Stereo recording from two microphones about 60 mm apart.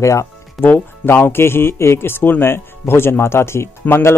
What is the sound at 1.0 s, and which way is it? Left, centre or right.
Speech, left.